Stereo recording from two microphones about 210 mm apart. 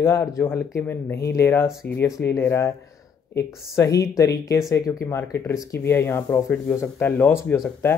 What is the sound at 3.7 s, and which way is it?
Speech, 15° left (ahead or behind).